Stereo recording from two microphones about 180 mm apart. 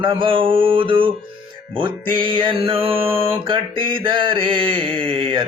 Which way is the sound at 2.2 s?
30° right (ahead or behind).